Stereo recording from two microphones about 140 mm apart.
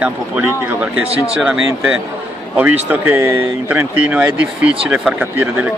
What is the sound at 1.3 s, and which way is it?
Speech, 5° right (ahead or behind).